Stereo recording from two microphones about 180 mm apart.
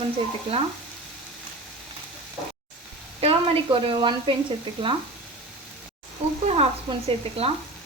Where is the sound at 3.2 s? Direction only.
35° right (ahead or behind).